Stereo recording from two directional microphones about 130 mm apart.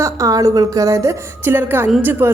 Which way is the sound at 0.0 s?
25° right (ahead or behind).